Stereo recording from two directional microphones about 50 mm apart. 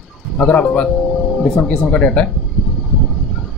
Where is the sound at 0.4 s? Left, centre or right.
Centre.